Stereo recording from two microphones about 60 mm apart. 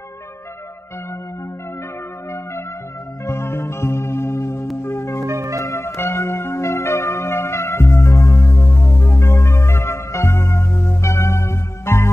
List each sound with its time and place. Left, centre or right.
3.3 s music: left
5.2 s music: right
5.6 s music: left